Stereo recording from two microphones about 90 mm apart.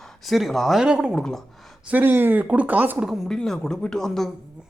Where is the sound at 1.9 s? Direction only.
20° right (ahead or behind).